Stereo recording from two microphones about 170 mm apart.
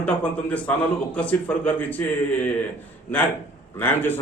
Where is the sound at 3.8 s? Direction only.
10° left (ahead or behind).